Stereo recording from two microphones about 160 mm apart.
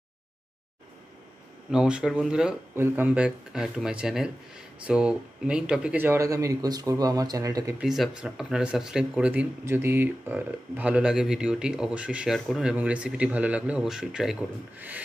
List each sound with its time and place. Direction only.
1.7 s speech: 5° right (ahead or behind); by 7.7 s 20° right (ahead or behind)
7.8 s speech: centre (ahead or behind)